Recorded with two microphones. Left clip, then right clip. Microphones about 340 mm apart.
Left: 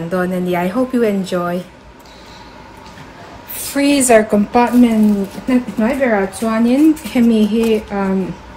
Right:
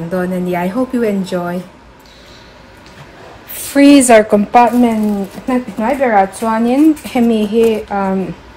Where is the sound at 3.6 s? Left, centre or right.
Right.